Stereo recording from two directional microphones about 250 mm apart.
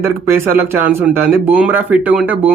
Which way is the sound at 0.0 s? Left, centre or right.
Centre.